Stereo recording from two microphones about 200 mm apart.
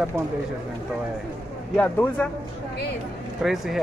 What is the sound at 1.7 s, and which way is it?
Speech, 5° left (ahead or behind).